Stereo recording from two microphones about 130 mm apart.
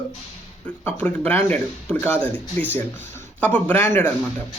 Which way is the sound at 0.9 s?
10° left (ahead or behind).